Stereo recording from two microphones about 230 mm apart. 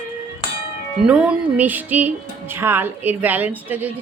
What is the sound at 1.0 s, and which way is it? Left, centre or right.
Speech, centre.